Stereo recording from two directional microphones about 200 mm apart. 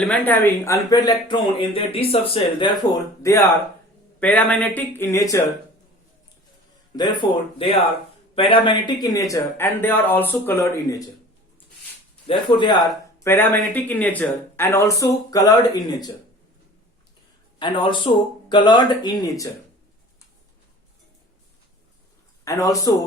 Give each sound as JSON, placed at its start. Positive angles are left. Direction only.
{"t": 0.0, "sound": "speech", "side_deg": 5}
{"t": 6.9, "sound": "speech", "side_deg": 20}
{"t": 12.3, "sound": "speech", "side_deg": 25}
{"t": 13.2, "sound": "speech", "side_deg": 10}
{"t": 17.6, "sound": "speech", "side_deg": 25}
{"t": 22.4, "sound": "speech", "side_deg": 15}